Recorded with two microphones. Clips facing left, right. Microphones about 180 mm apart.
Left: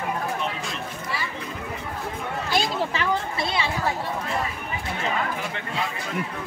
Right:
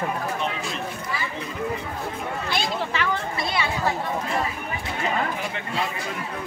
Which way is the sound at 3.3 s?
25° left (ahead or behind).